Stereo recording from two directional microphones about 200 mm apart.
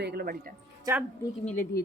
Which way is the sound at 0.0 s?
55° right (ahead or behind).